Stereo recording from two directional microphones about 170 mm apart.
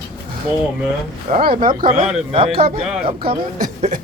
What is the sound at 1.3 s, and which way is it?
A woman's voice, 30° right (ahead or behind).